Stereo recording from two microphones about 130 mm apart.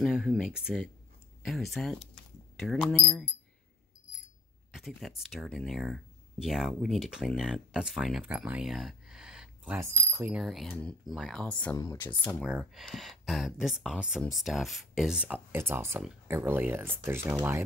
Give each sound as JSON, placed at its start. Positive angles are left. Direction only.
{"t": 0.0, "sound": "speech", "side_deg": 0}
{"t": 4.7, "sound": "speech", "side_deg": 0}
{"t": 8.2, "sound": "a sound", "side_deg": -10}
{"t": 9.8, "sound": "speech", "side_deg": -20}
{"t": 10.3, "sound": "speech", "side_deg": 0}
{"t": 10.7, "sound": "speech", "side_deg": 10}
{"t": 11.7, "sound": "speech", "side_deg": 25}
{"t": 12.4, "sound": "speech", "side_deg": -5}
{"t": 15.5, "sound": "speech", "side_deg": -20}